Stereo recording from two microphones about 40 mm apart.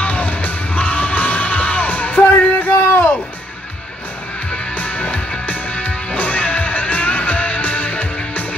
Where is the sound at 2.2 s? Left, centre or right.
Left.